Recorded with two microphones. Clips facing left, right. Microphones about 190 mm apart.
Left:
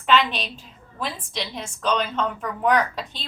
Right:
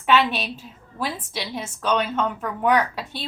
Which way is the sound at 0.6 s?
5° right (ahead or behind).